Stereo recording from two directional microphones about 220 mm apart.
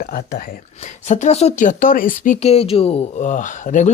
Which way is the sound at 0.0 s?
40° left (ahead or behind).